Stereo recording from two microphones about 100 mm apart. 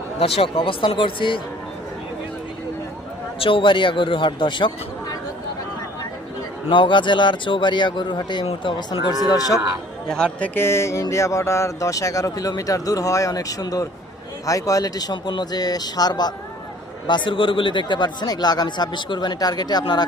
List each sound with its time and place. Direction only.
0.3 s speech: 65° left (ahead or behind)
3.3 s speech: 65° left (ahead or behind)
6.7 s speech: 55° left (ahead or behind)
9.2 s speech: 35° left (ahead or behind)
10.4 s speech: 20° left (ahead or behind); by 16.3 s 45° left (ahead or behind)
17.1 s speech: 55° left (ahead or behind)